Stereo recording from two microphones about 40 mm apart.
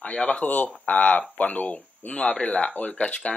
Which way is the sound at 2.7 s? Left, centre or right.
Left.